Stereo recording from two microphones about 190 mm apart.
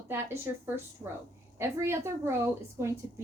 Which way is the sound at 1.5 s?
15° right (ahead or behind).